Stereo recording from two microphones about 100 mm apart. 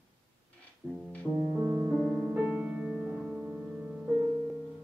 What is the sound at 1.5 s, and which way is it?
Music, 30° right (ahead or behind).